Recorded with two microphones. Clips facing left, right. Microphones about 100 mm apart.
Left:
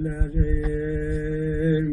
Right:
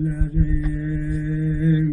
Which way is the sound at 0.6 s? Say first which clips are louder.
Even; 25° left (ahead or behind).